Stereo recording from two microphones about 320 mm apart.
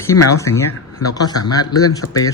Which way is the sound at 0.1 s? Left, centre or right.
Left.